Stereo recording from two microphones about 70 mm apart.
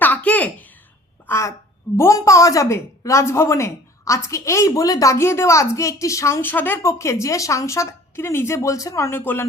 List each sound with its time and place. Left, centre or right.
0.0 s a sound: left
1.3 s speech: left
5.1 s speech: left
6.4 s speech: left
6.8 s speech: left
9.1 s speech: left